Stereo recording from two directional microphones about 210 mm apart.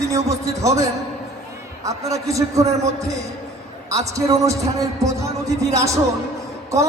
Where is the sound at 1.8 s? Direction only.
15° right (ahead or behind).